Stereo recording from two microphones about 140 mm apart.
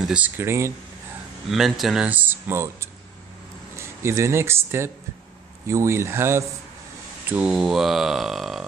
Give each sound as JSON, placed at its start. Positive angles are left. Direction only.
{"t": 0.0, "sound": "speech", "side_deg": -10}
{"t": 1.5, "sound": "speech", "side_deg": 0}
{"t": 7.2, "sound": "speech", "side_deg": -10}